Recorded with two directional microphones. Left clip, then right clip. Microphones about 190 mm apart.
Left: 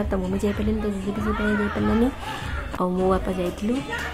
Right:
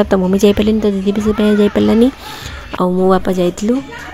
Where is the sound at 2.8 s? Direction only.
40° right (ahead or behind).